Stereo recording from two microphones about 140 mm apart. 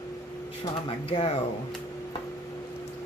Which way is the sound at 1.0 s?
45° left (ahead or behind).